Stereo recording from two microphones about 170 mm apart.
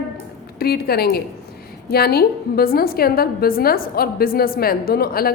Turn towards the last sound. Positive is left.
turn(degrees=60)  # may be behind; listen again after turning